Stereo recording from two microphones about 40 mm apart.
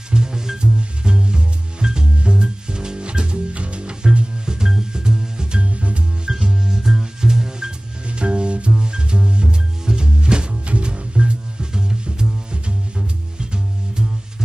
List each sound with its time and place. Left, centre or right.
0.1 s music: centre
6.3 s music: centre
8.1 s music: right